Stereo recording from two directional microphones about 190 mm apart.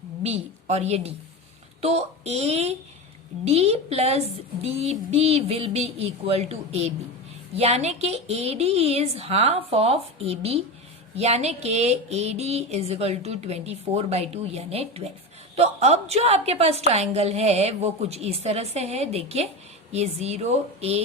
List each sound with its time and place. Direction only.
0.2 s a woman's voice: 35° right (ahead or behind)